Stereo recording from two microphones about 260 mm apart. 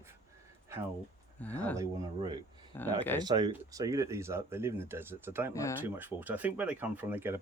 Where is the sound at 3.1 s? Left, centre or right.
Centre.